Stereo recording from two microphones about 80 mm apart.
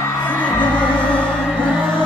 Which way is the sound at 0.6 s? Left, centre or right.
Centre.